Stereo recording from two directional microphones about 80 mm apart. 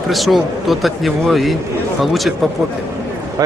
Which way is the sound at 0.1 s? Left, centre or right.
Centre.